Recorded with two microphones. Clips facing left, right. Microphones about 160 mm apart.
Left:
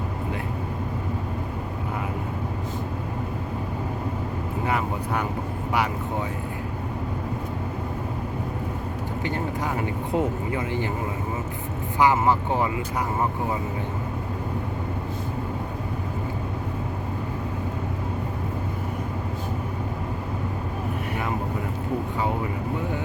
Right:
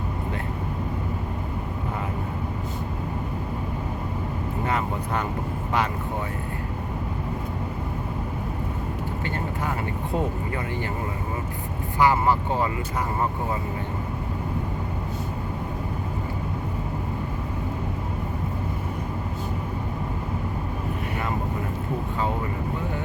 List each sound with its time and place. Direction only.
4.6 s vehicle: 10° left (ahead or behind)
9.2 s vehicle: 15° left (ahead or behind)
10.2 s speech: 20° left (ahead or behind)
11.9 s speech: 20° left (ahead or behind)